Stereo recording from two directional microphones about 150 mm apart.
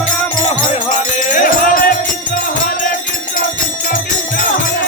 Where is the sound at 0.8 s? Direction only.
60° left (ahead or behind).